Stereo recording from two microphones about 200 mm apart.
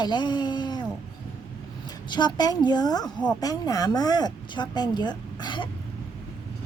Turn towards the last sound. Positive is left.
turn(degrees=20)  # may be behind; listen again after turning